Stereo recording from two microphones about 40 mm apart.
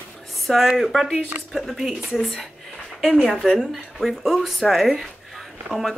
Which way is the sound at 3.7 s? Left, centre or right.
Centre.